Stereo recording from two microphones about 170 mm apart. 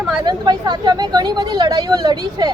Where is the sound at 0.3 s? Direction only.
25° right (ahead or behind).